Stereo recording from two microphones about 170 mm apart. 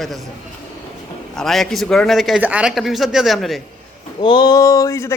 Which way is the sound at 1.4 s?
Centre (ahead or behind).